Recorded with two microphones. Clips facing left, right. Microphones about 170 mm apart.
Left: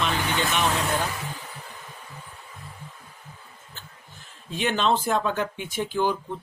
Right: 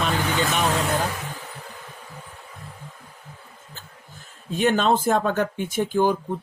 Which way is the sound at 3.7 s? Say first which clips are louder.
Right 2 dB; 45° right (ahead or behind).